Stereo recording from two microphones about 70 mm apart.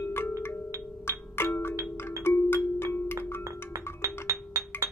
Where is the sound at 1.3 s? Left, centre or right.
Left.